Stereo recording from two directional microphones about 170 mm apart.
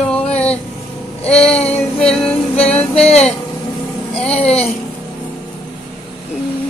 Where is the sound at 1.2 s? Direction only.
5° left (ahead or behind).